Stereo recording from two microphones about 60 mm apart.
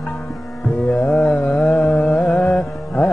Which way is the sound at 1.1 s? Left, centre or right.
Left.